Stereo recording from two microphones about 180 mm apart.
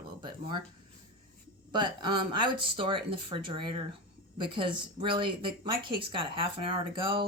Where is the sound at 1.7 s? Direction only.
25° right (ahead or behind).